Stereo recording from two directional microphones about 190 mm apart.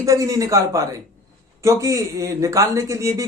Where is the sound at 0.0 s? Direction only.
15° right (ahead or behind).